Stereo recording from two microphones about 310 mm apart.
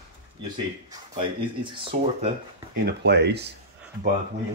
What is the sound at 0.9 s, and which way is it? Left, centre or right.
Speech, centre.